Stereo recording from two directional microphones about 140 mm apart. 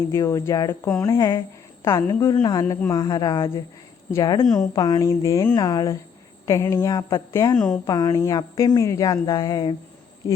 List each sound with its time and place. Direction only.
0.1 s a woman's voice: 20° left (ahead or behind)